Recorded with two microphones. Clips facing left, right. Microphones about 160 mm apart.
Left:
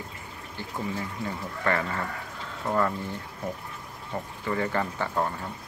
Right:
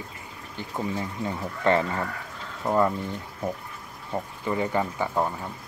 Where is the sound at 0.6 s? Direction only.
20° right (ahead or behind).